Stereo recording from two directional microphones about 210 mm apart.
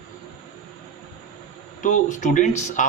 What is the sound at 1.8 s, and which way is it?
A man's voice, 35° left (ahead or behind).